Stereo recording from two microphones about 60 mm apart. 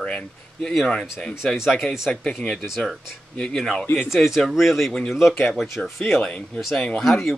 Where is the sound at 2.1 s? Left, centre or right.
Centre.